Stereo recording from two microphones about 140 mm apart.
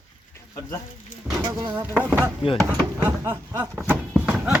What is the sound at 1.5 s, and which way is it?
Speech, 25° right (ahead or behind).